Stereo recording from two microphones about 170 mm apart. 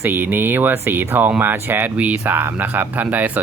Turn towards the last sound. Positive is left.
turn(degrees=-10)  # may be behind; listen again after turning